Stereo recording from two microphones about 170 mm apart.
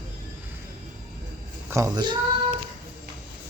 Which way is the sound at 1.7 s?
20° right (ahead or behind).